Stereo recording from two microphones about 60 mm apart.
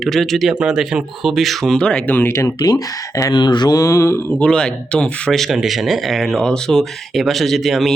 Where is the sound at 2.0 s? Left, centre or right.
Left.